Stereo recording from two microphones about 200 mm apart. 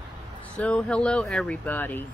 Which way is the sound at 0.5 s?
5° left (ahead or behind).